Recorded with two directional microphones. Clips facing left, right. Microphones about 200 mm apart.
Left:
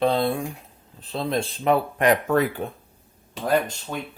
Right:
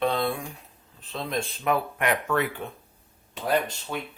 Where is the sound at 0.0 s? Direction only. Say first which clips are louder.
Left 4 dB; 35° left (ahead or behind).